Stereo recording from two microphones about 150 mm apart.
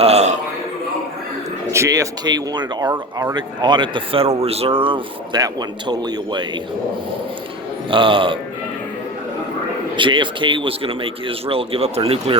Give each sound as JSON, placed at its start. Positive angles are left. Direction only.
{"t": 0.0, "sound": "a sound", "side_deg": -45}
{"t": 1.7, "sound": "speech", "side_deg": -20}
{"t": 7.9, "sound": "speech", "side_deg": -35}
{"t": 9.9, "sound": "speech", "side_deg": -30}